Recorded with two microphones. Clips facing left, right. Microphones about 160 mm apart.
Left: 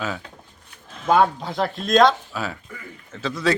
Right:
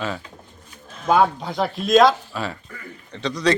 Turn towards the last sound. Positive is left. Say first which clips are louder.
# right 2 dB
turn(degrees=5)  # may be behind; listen again after turning